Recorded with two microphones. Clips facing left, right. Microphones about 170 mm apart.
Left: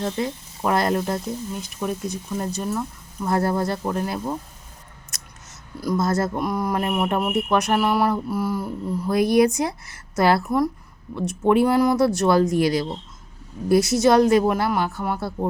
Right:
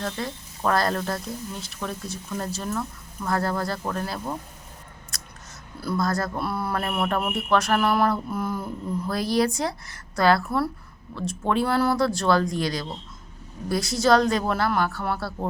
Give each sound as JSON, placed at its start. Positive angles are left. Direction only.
{"t": 0.0, "sound": "speech", "side_deg": 20}
{"t": 5.8, "sound": "speech", "side_deg": 20}